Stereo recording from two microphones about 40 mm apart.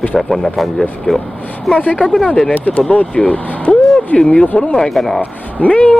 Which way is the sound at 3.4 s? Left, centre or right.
Left.